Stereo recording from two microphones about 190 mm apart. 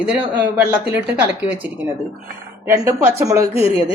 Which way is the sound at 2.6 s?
15° right (ahead or behind).